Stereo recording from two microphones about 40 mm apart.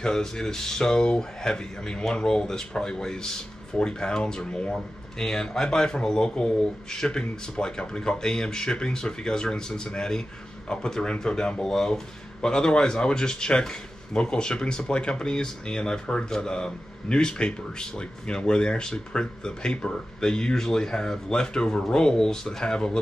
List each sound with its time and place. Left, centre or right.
0.0 s speech: centre
4.7 s speech: centre